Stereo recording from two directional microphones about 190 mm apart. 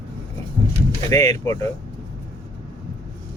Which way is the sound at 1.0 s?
15° left (ahead or behind).